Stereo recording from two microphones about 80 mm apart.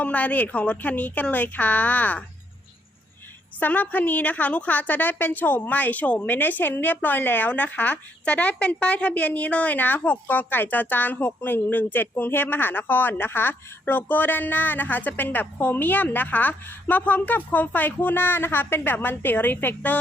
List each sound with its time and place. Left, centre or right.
0.0 s a woman's voice: centre
3.6 s a woman's voice: left